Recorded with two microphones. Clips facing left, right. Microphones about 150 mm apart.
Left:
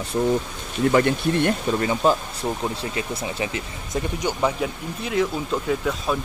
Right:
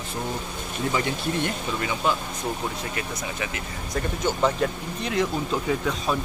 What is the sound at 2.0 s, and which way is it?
Speech, 40° left (ahead or behind).